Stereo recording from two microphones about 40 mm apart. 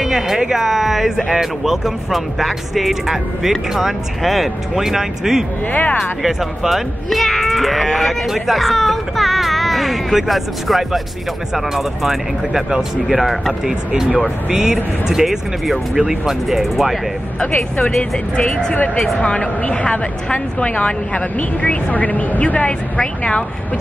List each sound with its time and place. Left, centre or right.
0.0 s a sound: centre
0.4 s speech: centre
5.7 s speech: left
6.2 s speech: centre
15.9 s speech: centre
17.8 s speech: left
22.7 s speech: left